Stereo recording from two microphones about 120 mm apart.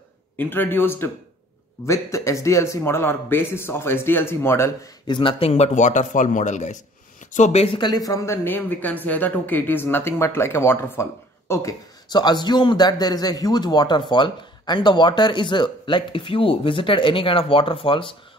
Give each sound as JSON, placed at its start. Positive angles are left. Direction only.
{"t": 0.4, "sound": "a man's voice", "side_deg": 15}
{"t": 5.0, "sound": "speech", "side_deg": 45}
{"t": 5.5, "sound": "a man's voice", "side_deg": 70}
{"t": 7.3, "sound": "speech", "side_deg": 80}
{"t": 7.6, "sound": "speech", "side_deg": 45}
{"t": 7.9, "sound": "a man's voice", "side_deg": 30}
{"t": 8.5, "sound": "a man's voice", "side_deg": 15}
{"t": 12.1, "sound": "a man's voice", "side_deg": 35}